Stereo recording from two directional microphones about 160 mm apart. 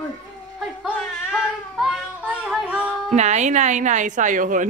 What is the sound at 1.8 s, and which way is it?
Child singing, 5° left (ahead or behind).